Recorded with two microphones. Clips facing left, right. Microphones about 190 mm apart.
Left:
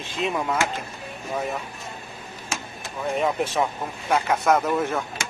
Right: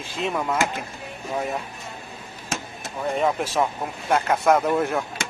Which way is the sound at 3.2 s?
5° left (ahead or behind).